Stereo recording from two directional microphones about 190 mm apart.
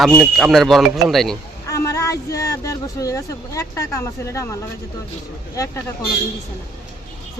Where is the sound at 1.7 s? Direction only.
15° left (ahead or behind).